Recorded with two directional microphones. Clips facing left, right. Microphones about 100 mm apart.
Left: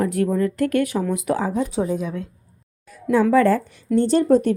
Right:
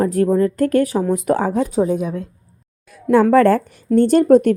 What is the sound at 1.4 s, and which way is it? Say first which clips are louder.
Speech: right 4 dB; 65° right (ahead or behind).